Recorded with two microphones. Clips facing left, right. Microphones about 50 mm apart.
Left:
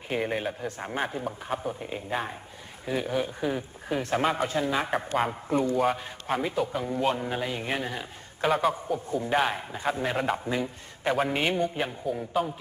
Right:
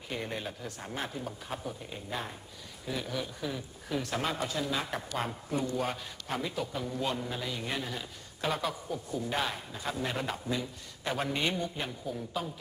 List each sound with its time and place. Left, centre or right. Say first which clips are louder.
0.1 s a man's voice: left 8 dB; left
11.8 s speech: left 7 dB; left